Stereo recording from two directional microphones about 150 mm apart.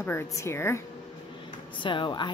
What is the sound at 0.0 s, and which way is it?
Speech, 15° left (ahead or behind).